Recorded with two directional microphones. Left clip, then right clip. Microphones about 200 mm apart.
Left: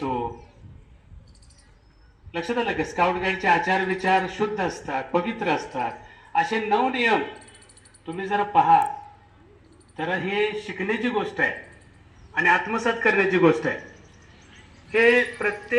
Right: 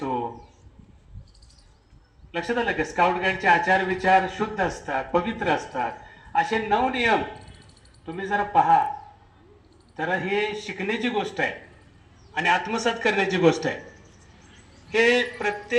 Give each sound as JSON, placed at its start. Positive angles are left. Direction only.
{"t": 0.0, "sound": "a sound", "side_deg": 10}
{"t": 2.3, "sound": "a man's voice", "side_deg": 5}
{"t": 9.9, "sound": "a man's voice", "side_deg": 0}
{"t": 12.3, "sound": "a man's voice", "side_deg": -40}
{"t": 14.9, "sound": "a man's voice", "side_deg": -55}